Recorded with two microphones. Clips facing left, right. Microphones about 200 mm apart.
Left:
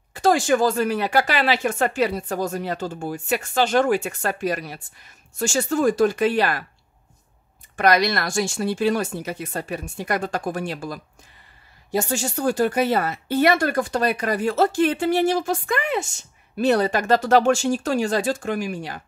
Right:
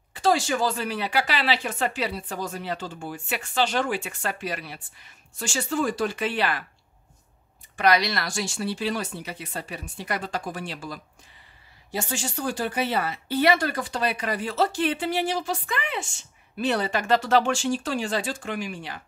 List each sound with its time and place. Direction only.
0.1 s speech: 45° left (ahead or behind)
7.7 s speech: 50° left (ahead or behind)